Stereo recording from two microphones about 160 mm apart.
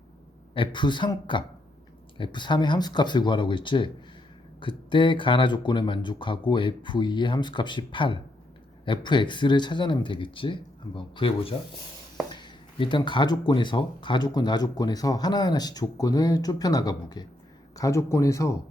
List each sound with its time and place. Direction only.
0.5 s speech: 30° left (ahead or behind)